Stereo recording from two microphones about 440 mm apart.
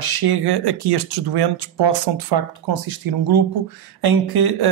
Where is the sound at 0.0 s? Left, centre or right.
Right.